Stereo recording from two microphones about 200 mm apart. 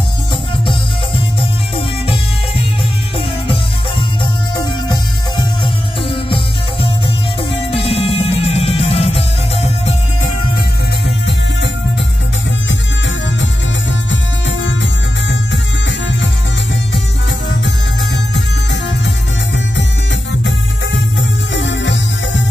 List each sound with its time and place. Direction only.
6.0 s music: 25° left (ahead or behind)
11.1 s music: 60° left (ahead or behind)
20.4 s music: 65° left (ahead or behind)